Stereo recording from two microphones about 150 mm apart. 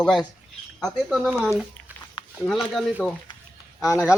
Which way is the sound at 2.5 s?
Centre (ahead or behind).